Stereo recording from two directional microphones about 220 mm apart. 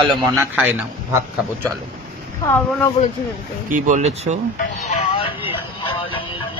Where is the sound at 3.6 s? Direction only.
35° right (ahead or behind).